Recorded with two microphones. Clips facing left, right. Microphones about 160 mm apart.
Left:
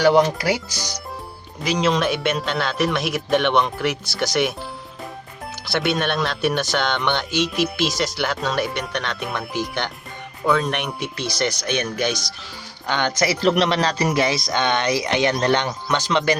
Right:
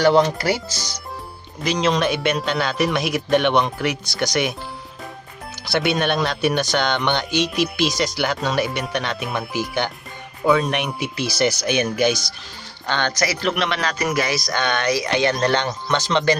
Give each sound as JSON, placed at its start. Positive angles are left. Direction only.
{"t": 0.0, "sound": "speech", "side_deg": 10}
{"t": 5.6, "sound": "speech", "side_deg": 0}
{"t": 12.9, "sound": "speech", "side_deg": 15}
{"t": 13.1, "sound": "speech", "side_deg": 30}